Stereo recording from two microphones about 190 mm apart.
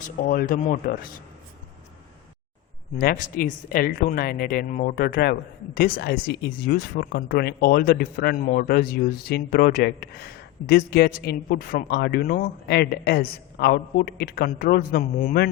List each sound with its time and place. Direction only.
0.0 s a woman's voice: 50° left (ahead or behind)
3.0 s a woman's voice: 45° left (ahead or behind)